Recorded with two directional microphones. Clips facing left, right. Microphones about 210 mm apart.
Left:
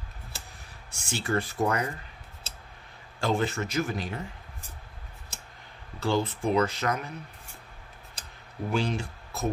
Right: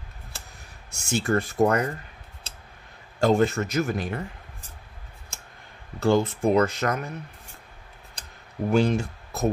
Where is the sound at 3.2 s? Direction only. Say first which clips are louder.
Right 7 dB; 45° right (ahead or behind).